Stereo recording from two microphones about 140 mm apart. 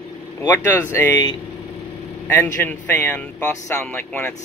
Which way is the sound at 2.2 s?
15° left (ahead or behind).